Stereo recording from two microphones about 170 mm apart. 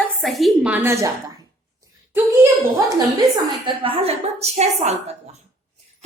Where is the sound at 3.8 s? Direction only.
35° right (ahead or behind).